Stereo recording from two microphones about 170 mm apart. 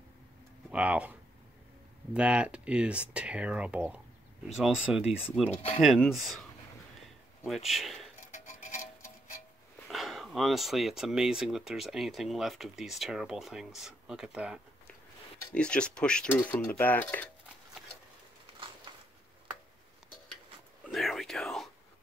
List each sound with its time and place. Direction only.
0.7 s speech: 5° right (ahead or behind)
2.1 s speech: 5° right (ahead or behind)
7.4 s speech: centre (ahead or behind)
8.5 s a sound: 45° left (ahead or behind)
9.8 s speech: centre (ahead or behind)
15.5 s speech: 5° left (ahead or behind)
18.9 s a sound: 25° right (ahead or behind)
20.8 s whispering: centre (ahead or behind)